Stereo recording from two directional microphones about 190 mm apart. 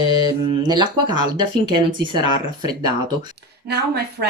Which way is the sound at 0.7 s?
25° right (ahead or behind).